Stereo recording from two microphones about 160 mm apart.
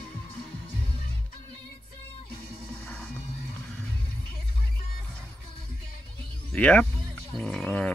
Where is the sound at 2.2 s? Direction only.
70° left (ahead or behind).